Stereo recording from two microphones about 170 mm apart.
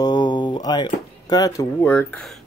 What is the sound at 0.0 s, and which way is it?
Speech, 25° left (ahead or behind).